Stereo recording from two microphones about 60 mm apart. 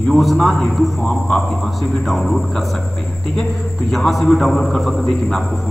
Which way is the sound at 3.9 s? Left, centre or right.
Centre.